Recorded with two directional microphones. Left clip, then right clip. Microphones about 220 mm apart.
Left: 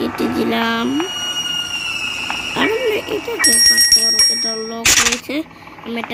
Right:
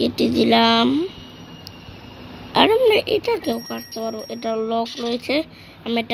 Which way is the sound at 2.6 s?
5° right (ahead or behind).